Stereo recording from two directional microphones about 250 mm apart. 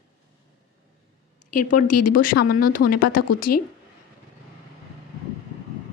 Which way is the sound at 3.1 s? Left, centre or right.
Left.